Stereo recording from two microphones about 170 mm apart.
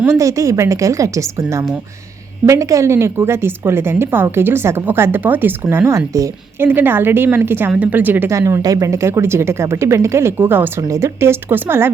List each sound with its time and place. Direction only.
0.0 s a woman's voice: 15° right (ahead or behind)